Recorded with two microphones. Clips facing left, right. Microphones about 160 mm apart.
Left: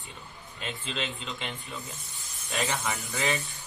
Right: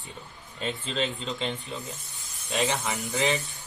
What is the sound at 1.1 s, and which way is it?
Speech, centre (ahead or behind).